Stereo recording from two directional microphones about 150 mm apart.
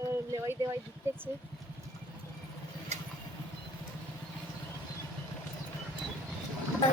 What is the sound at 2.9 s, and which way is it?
Vehicle, 50° right (ahead or behind).